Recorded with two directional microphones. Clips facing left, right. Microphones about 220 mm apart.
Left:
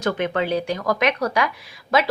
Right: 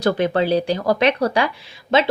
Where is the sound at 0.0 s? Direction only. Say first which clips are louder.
Right 4 dB; 35° right (ahead or behind).